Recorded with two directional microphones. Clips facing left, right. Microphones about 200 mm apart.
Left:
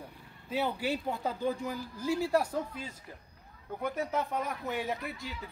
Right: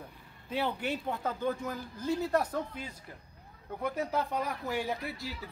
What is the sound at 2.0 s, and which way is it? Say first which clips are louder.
Speech: left 1 dB; 20° right (ahead or behind).